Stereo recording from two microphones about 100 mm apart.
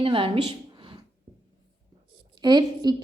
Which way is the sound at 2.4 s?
45° right (ahead or behind).